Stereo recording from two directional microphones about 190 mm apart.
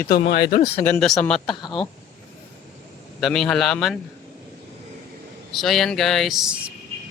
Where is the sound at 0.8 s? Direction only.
5° left (ahead or behind).